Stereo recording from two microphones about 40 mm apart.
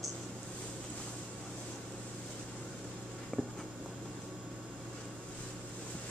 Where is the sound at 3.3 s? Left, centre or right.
Centre.